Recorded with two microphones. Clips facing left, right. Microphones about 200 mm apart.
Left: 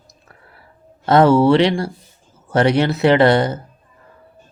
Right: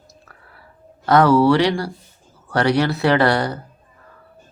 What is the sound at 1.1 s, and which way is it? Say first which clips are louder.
Speech: left 2 dB; 25° left (ahead or behind).